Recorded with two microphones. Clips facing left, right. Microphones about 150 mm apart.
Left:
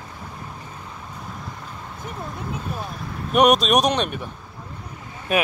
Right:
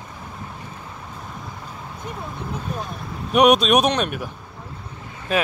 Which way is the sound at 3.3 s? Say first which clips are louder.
Right 1 dB; centre (ahead or behind).